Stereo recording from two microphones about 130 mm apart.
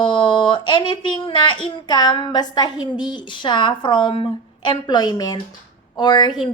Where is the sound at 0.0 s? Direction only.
40° left (ahead or behind).